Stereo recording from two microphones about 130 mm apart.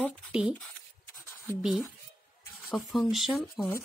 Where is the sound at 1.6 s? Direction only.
5° right (ahead or behind).